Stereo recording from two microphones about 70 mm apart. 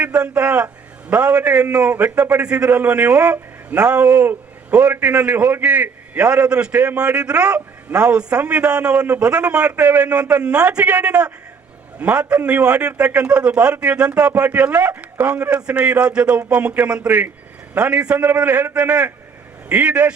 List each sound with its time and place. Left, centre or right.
0.0 s a man's voice: centre